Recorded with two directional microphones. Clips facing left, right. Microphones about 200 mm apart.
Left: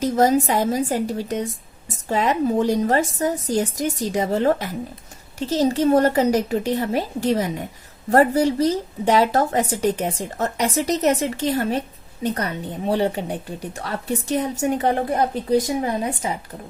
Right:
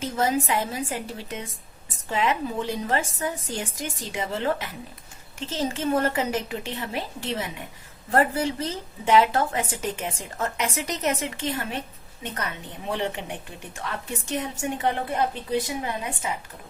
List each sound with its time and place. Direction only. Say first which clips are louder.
0.0 s a woman's voice: left 7 dB; 40° left (ahead or behind)